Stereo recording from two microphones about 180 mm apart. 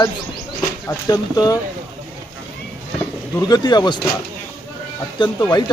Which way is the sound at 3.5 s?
25° left (ahead or behind).